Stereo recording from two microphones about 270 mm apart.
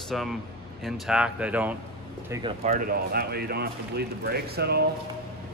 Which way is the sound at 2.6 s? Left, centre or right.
Right.